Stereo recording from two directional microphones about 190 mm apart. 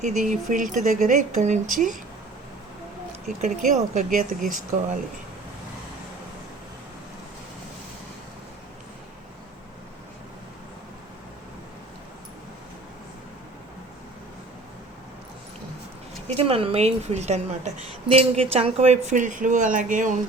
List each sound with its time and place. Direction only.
0.0 s speech: 40° right (ahead or behind)
3.4 s speech: 40° right (ahead or behind)
16.2 s speech: 30° right (ahead or behind)